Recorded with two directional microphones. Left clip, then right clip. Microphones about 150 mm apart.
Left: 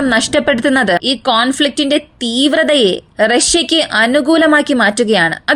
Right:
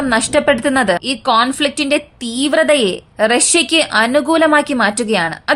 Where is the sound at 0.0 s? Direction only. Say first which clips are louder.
Left 1 dB; 30° left (ahead or behind).